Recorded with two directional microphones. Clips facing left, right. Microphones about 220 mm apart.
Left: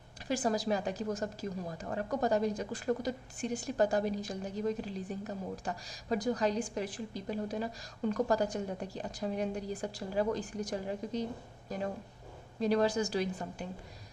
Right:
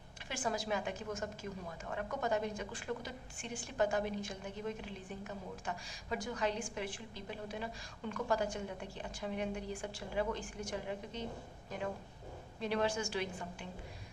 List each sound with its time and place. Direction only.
0.3 s a woman's voice: 35° left (ahead or behind)